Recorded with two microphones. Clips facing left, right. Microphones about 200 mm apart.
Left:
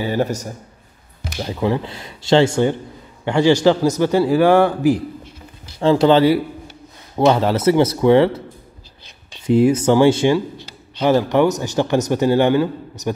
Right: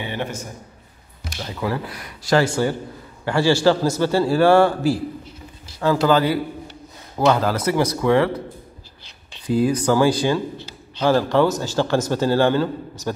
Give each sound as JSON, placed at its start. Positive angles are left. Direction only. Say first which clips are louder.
{"t": 0.0, "sound": "a man's voice", "louder": "left 7 dB", "side_deg": 40}
{"t": 1.4, "sound": "speech", "louder": "left 5 dB", "side_deg": 25}
{"t": 9.5, "sound": "speech", "louder": "left 5 dB", "side_deg": 25}